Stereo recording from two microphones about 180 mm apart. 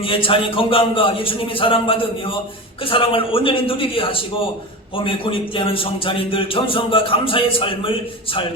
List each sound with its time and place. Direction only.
0.0 s a man's voice: 30° left (ahead or behind)